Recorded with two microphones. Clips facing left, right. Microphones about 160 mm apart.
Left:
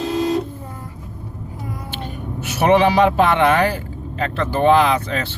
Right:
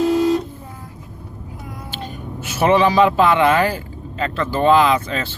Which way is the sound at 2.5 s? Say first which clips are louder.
Left 1 dB; 65° left (ahead or behind).